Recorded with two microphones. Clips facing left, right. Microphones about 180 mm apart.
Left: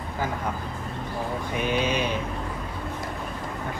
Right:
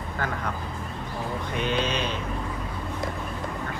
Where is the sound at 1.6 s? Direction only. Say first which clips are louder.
Left 2 dB; 10° left (ahead or behind).